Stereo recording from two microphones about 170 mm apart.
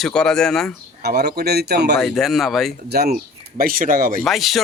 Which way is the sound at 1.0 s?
70° right (ahead or behind).